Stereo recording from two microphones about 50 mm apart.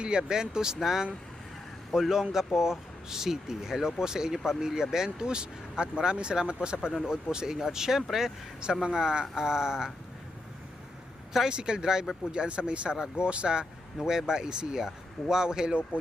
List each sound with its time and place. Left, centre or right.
0.0 s speech: centre
6.9 s speech: centre
7.3 s speech: centre
11.3 s speech: centre